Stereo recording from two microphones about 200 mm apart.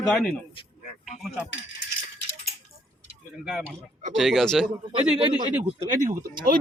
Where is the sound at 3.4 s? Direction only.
Centre (ahead or behind).